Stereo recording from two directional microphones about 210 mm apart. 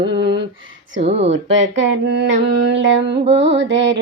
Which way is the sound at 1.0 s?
30° right (ahead or behind).